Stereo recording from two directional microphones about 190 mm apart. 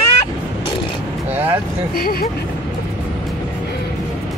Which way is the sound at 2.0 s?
50° left (ahead or behind).